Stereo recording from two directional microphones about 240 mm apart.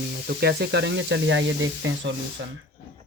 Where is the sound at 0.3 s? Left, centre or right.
Right.